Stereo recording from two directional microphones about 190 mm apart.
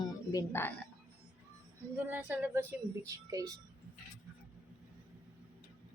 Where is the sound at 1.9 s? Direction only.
10° right (ahead or behind).